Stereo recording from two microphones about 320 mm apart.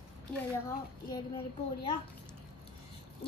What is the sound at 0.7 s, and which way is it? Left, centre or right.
Speech, centre.